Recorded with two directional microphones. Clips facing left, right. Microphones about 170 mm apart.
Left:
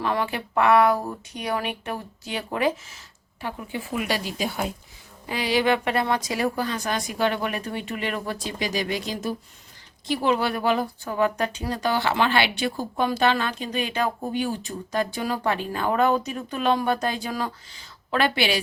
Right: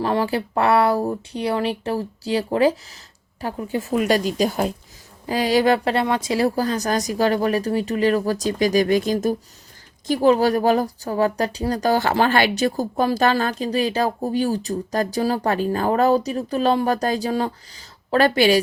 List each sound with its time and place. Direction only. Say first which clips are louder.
0.0 s speech: right 5 dB; 35° right (ahead or behind)